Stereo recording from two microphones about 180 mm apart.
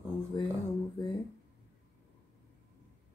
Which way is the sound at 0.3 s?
25° left (ahead or behind).